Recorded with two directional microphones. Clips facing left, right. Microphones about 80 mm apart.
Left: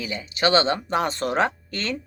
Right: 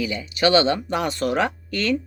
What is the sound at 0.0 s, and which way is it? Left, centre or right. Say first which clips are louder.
Speech: right 3 dB; left.